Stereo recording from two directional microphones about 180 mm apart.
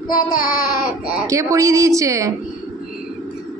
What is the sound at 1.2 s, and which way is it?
A woman's voice, 15° right (ahead or behind).